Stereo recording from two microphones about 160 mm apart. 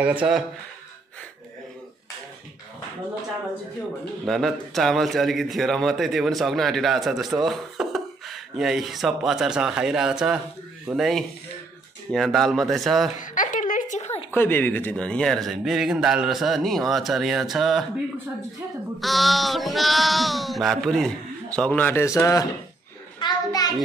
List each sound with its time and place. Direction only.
0.0 s speech: 10° right (ahead or behind)
4.3 s a man's voice: centre (ahead or behind)
13.1 s a sound: 55° left (ahead or behind)
14.3 s a man's voice: 15° left (ahead or behind)
18.9 s a man's voice: centre (ahead or behind); by 22.5 s 20° left (ahead or behind)
23.1 s a sound: 25° left (ahead or behind)